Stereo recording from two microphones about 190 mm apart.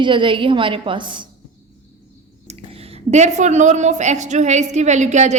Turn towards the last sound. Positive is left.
turn(degrees=-40)  # may be behind; listen again after turning